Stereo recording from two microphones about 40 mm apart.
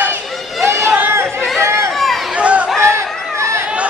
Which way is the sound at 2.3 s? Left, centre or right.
Right.